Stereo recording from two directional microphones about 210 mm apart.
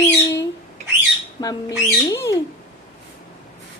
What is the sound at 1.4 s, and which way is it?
Speech, 15° left (ahead or behind).